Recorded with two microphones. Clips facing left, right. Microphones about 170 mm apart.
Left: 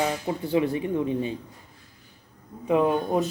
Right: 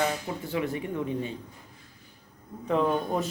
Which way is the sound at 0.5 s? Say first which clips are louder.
Left 6 dB; 25° left (ahead or behind).